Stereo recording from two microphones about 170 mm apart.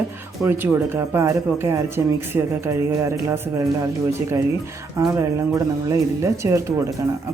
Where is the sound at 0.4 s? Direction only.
10° right (ahead or behind).